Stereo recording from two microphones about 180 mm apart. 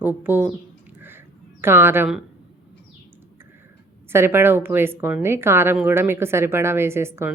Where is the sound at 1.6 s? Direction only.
15° right (ahead or behind).